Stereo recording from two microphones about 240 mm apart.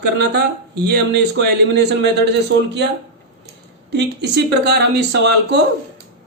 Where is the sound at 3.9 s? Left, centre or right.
Right.